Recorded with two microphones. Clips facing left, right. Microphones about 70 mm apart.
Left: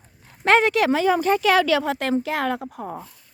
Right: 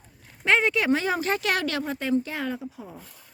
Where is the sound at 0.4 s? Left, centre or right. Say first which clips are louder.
Left 5 dB; left.